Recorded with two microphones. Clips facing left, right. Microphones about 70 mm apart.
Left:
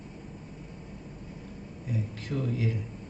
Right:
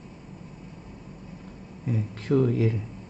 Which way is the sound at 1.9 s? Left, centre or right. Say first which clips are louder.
Right 9 dB; right.